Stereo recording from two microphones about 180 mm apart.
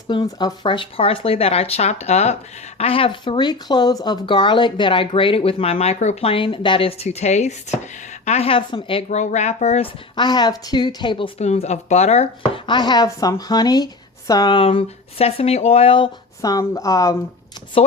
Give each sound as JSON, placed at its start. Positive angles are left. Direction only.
{"t": 0.1, "sound": "speech", "side_deg": 25}
{"t": 9.0, "sound": "speech", "side_deg": 40}
{"t": 10.2, "sound": "speech", "side_deg": 25}